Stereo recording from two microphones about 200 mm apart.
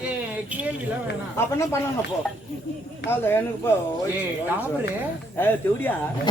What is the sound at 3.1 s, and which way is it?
Speech, 10° left (ahead or behind).